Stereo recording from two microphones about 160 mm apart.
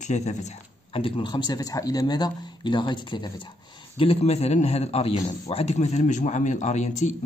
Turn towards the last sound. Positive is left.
turn(degrees=45)  # may be behind; listen again after turning